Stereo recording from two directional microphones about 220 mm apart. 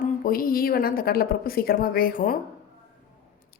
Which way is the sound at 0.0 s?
40° left (ahead or behind).